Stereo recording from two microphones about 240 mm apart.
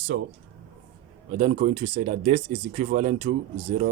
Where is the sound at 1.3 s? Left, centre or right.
Right.